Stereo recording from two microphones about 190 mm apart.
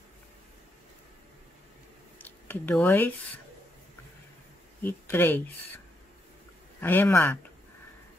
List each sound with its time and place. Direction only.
2.1 s a sound: 10° left (ahead or behind)
4.8 s speech: 10° left (ahead or behind)
6.8 s speech: 10° left (ahead or behind)